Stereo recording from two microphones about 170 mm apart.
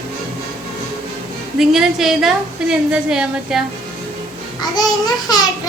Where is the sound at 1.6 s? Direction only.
Centre (ahead or behind).